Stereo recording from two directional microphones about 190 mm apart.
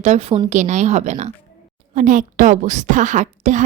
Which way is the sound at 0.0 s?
35° right (ahead or behind).